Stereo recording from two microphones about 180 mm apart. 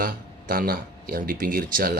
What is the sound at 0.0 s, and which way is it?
Speech, 50° right (ahead or behind).